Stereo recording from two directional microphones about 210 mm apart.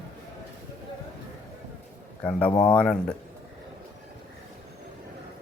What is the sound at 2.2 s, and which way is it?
Speech, 5° left (ahead or behind).